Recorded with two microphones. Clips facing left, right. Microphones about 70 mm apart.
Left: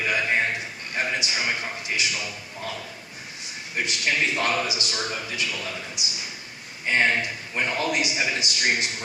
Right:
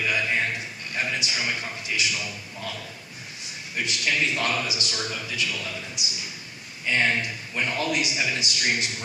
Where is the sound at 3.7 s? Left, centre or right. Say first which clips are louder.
Left 1 dB; left.